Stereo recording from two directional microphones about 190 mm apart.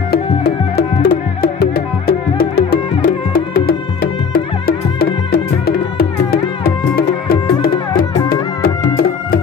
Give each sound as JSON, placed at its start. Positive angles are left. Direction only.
{"t": 0.1, "sound": "music", "side_deg": 55}